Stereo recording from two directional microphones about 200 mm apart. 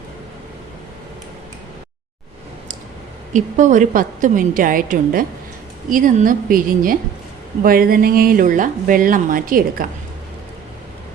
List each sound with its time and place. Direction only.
3.3 s a woman's voice: 40° right (ahead or behind)